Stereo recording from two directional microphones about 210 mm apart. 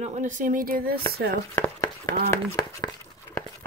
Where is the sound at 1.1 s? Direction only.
45° right (ahead or behind).